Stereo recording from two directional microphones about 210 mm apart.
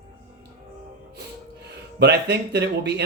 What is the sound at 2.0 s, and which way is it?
Speech, 55° right (ahead or behind).